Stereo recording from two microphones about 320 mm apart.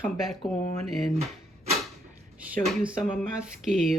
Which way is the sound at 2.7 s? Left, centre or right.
Centre.